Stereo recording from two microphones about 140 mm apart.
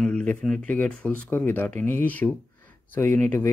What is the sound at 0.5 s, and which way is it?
Speech, 10° left (ahead or behind).